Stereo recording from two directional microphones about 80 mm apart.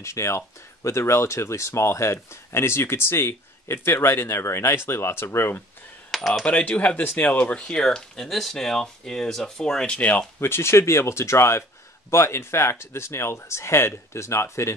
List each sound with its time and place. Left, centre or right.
0.0 s speech: left
6.1 s speech: centre
6.4 s speech: centre
10.5 s speech: left